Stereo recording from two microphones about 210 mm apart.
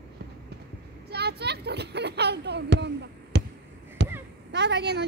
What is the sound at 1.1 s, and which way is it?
Speech, 50° right (ahead or behind).